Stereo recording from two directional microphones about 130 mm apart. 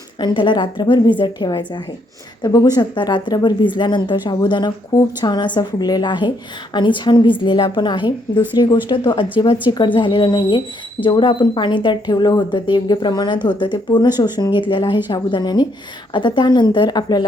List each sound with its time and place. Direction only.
0.2 s a woman's voice: 35° left (ahead or behind)